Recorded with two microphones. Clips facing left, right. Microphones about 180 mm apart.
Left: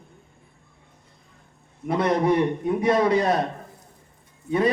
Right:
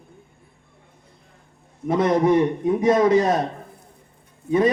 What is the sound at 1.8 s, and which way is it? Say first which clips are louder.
A man's voice: right 3 dB; 20° right (ahead or behind).